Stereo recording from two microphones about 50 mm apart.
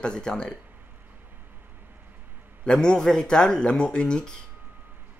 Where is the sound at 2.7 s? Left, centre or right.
Centre.